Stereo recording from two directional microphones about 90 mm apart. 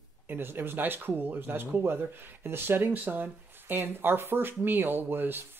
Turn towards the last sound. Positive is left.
turn(degrees=-25)  # may be behind; listen again after turning